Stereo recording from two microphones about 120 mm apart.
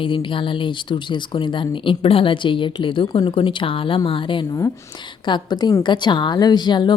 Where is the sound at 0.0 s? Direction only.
45° left (ahead or behind).